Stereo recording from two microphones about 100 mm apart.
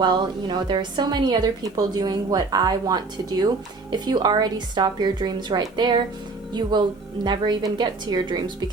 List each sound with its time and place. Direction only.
0.0 s a woman's voice: 45° right (ahead or behind)